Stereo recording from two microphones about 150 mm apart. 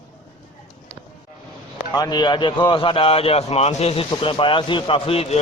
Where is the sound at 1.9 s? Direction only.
25° left (ahead or behind).